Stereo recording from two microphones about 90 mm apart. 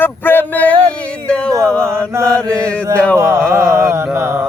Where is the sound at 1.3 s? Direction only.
10° left (ahead or behind).